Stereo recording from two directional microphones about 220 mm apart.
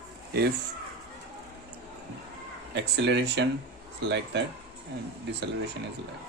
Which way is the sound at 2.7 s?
50° right (ahead or behind).